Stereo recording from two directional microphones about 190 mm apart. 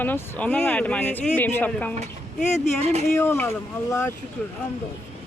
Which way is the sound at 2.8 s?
35° right (ahead or behind).